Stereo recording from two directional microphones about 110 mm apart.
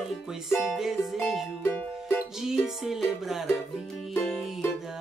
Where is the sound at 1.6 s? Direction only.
20° left (ahead or behind).